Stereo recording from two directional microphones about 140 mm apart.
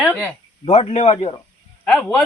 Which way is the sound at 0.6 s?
50° left (ahead or behind).